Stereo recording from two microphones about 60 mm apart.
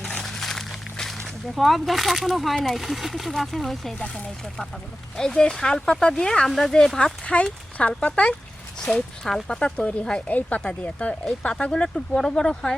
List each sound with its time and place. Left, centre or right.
0.0 s a sound: centre
1.5 s speech: centre
3.9 s speech: centre
10.2 s speech: left